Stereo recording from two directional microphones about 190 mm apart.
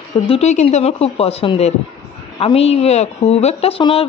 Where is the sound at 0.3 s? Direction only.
35° left (ahead or behind).